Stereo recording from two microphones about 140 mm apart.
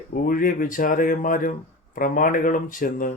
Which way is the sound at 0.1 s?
85° left.